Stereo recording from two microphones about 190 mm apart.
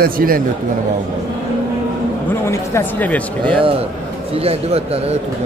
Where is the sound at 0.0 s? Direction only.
50° right (ahead or behind).